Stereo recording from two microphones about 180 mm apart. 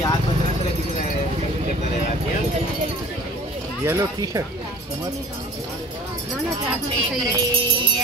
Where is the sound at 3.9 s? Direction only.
20° right (ahead or behind).